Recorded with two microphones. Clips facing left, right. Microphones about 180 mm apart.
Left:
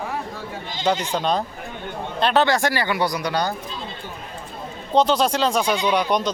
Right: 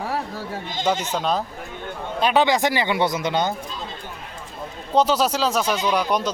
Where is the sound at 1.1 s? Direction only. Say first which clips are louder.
Left 1 dB; 5° right (ahead or behind); by 3.5 s 20° right (ahead or behind).